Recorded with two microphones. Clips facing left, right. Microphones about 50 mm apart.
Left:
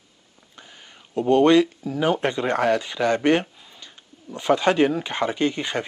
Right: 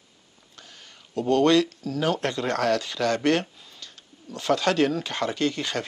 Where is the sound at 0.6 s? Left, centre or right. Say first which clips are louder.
Left 2 dB; centre.